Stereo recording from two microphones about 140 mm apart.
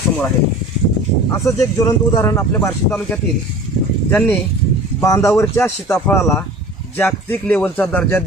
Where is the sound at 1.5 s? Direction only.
25° left (ahead or behind).